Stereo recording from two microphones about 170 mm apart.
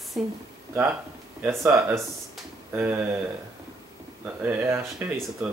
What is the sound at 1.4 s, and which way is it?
Speech, 15° right (ahead or behind).